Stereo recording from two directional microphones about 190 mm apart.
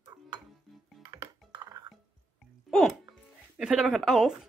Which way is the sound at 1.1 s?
20° right (ahead or behind).